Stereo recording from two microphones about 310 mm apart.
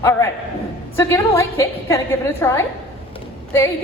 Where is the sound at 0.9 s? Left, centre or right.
Centre.